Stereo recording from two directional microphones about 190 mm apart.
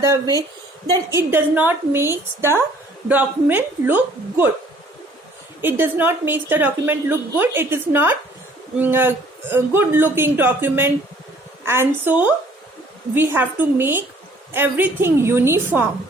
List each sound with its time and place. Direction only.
0.0 s a woman's voice: 15° right (ahead or behind)
5.6 s a woman's voice: 10° right (ahead or behind)